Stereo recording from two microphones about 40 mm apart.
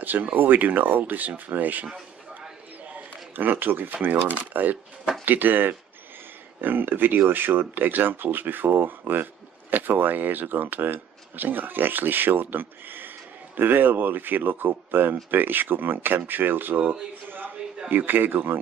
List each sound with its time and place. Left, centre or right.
0.0 s speech: right
2.9 s speech: right